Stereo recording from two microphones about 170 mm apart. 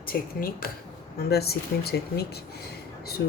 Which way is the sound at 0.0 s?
60° left (ahead or behind).